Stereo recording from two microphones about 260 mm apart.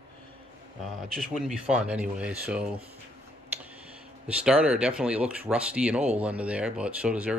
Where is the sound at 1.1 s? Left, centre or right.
Centre.